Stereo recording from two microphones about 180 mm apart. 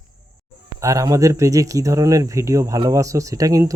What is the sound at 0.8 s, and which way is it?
Speech, 20° right (ahead or behind).